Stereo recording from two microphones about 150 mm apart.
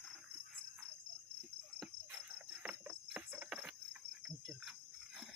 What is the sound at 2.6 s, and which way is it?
Cricket, 10° right (ahead or behind).